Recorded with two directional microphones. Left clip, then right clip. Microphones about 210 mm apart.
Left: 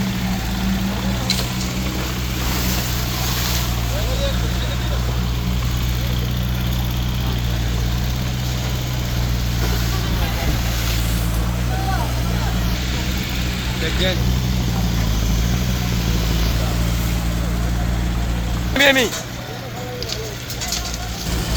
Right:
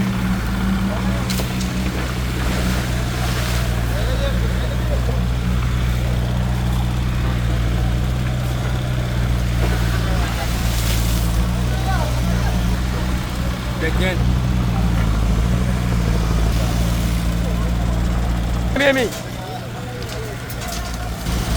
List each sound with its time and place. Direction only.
18.7 s vehicle: 55° left (ahead or behind)